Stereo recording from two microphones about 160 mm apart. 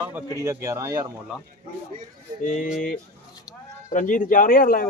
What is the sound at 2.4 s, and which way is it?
Speech, 50° left (ahead or behind).